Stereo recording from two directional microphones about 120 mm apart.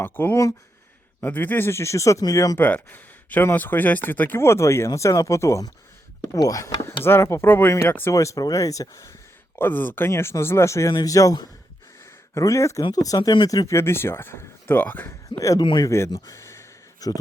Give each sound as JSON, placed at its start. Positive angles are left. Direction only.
{"t": 0.0, "sound": "speech", "side_deg": 15}
{"t": 2.6, "sound": "speech", "side_deg": 15}
{"t": 9.6, "sound": "speech", "side_deg": 15}
{"t": 15.3, "sound": "speech", "side_deg": 30}
{"t": 16.0, "sound": "a sound", "side_deg": 30}